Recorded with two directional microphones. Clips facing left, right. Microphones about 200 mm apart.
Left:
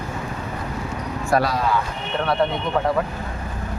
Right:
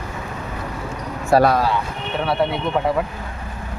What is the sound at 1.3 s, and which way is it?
Speech, 30° right (ahead or behind).